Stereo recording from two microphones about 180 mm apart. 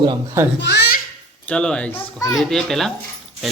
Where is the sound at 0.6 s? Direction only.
65° left (ahead or behind).